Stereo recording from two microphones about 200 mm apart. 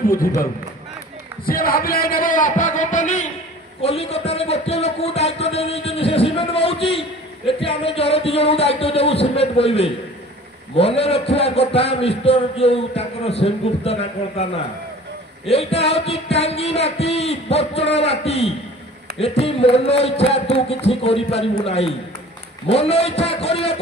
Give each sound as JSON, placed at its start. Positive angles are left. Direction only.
{"t": 1.4, "sound": "music", "side_deg": 45}
{"t": 3.8, "sound": "a man's voice", "side_deg": 30}
{"t": 15.4, "sound": "music", "side_deg": 30}
{"t": 19.1, "sound": "a man's voice", "side_deg": 30}
{"t": 22.7, "sound": "music", "side_deg": 30}